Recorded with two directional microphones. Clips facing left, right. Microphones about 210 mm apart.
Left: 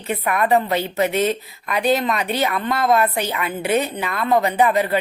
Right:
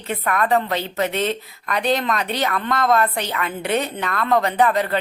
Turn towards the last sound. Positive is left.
turn(degrees=10)  # may be behind; listen again after turning